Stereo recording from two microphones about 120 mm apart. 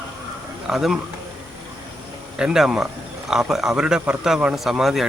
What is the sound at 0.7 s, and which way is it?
Speech, 5° right (ahead or behind).